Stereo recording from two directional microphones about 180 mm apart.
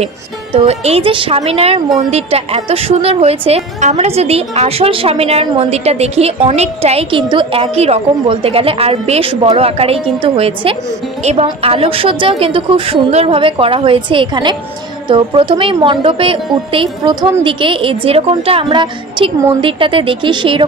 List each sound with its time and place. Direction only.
0.0 s a woman's voice: 35° right (ahead or behind)